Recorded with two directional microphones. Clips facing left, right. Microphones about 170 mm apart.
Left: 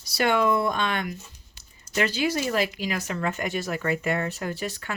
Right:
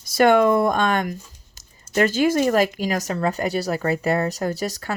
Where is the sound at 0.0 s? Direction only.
50° right (ahead or behind).